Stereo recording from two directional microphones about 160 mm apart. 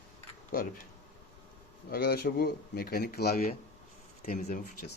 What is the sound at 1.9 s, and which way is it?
A man's voice, 70° left (ahead or behind).